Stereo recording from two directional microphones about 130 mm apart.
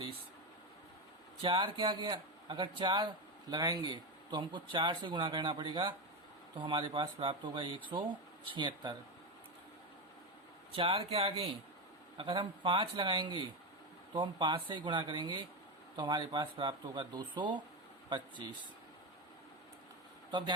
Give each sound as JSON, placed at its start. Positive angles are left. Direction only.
{"t": 1.4, "sound": "speech", "side_deg": -40}
{"t": 10.7, "sound": "speech", "side_deg": -45}